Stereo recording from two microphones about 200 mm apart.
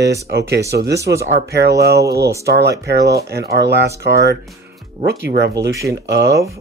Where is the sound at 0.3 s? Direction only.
55° right (ahead or behind).